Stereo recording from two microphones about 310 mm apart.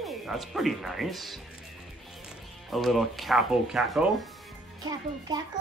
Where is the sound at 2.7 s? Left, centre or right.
Centre.